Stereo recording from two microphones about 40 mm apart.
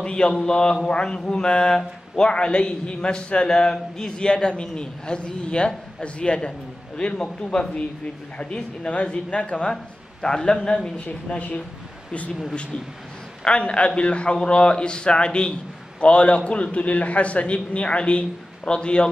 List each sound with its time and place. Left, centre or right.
0.0 s a man's voice: left
3.4 s a man's voice: centre
10.2 s a man's voice: centre
13.4 s a man's voice: left